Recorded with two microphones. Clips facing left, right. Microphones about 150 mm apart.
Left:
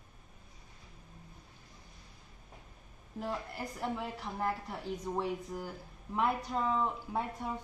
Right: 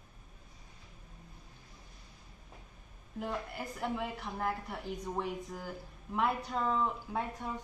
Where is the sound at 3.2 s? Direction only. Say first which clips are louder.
Even; centre (ahead or behind).